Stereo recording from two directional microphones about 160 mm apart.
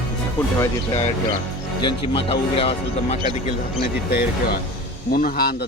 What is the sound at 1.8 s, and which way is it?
Speech, 35° left (ahead or behind).